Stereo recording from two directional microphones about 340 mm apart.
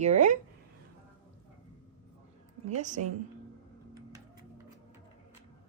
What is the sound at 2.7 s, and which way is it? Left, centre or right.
Speech, right.